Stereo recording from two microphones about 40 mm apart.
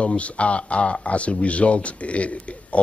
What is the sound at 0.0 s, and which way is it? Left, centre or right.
Speech, left.